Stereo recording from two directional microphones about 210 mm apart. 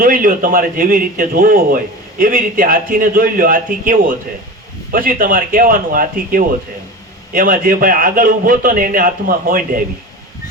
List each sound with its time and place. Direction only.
0.0 s a man's voice: 40° right (ahead or behind)